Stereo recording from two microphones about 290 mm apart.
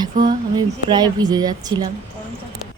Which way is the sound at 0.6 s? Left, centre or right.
Centre.